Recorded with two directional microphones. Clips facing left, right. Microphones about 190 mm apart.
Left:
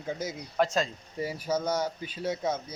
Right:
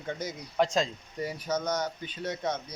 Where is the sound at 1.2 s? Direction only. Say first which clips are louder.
Left 2 dB; 5° left (ahead or behind).